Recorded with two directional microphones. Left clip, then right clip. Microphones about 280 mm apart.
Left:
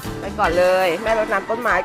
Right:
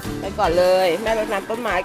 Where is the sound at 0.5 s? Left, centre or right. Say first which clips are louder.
Even; centre.